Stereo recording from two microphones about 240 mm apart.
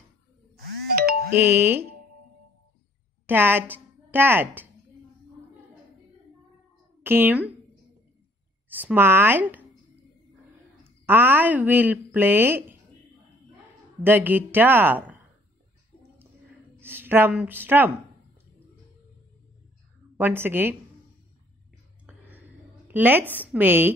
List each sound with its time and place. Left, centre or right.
0.9 s music: right
1.3 s speech: centre
3.3 s a woman's voice: centre
7.0 s speech: centre
8.6 s speech: centre
10.8 s speech: centre
14.0 s speech: centre
16.8 s speech: centre
20.2 s speech: centre
22.8 s speech: centre